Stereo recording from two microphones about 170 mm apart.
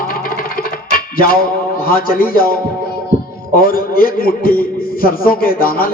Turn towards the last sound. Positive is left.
turn(degrees=60)  # may be behind; listen again after turning